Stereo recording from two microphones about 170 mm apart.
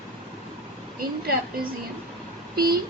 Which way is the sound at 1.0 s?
60° right (ahead or behind).